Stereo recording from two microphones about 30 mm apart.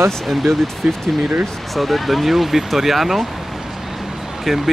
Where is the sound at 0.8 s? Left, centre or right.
Right.